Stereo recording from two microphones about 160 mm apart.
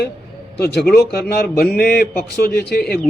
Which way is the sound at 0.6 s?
85° left.